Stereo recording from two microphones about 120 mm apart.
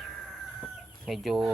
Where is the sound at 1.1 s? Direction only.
Centre (ahead or behind).